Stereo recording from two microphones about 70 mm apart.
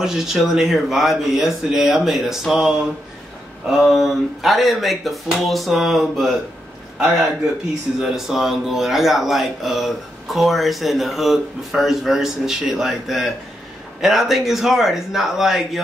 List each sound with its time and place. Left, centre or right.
0.0 s speech: centre
8.0 s speech: centre